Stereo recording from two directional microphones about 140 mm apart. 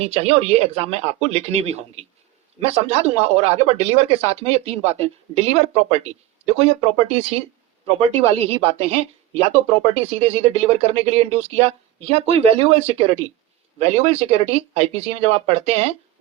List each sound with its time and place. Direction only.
0.0 s a woman's voice: 50° right (ahead or behind)
7.9 s a woman's voice: 45° right (ahead or behind)